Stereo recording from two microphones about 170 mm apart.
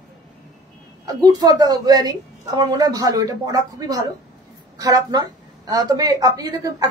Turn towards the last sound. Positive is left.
turn(degrees=-25)  # may be behind; listen again after turning